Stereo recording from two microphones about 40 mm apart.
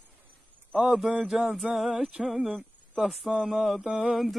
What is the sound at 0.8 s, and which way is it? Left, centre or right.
Mantra, centre.